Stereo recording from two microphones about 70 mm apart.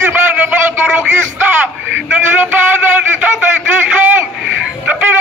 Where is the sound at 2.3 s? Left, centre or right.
Right.